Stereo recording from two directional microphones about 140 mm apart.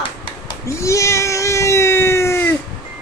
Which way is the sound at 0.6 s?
20° left (ahead or behind).